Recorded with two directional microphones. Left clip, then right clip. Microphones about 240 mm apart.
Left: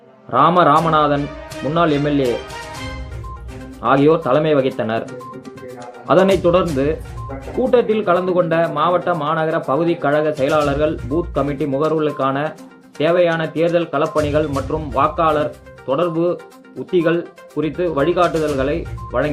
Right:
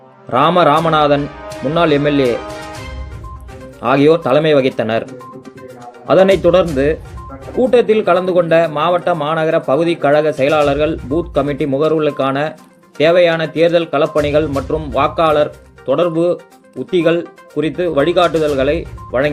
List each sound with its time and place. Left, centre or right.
0.3 s speech: right
3.8 s speech: right
6.1 s speech: right